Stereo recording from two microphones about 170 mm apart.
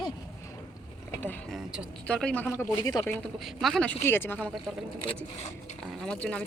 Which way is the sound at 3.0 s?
5° left (ahead or behind).